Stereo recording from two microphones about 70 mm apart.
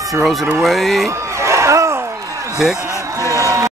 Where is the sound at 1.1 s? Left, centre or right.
Right.